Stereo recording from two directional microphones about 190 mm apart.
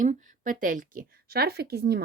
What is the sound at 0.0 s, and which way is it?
A woman's voice, 45° right (ahead or behind).